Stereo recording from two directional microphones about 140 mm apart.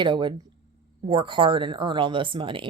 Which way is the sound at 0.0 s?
35° right (ahead or behind).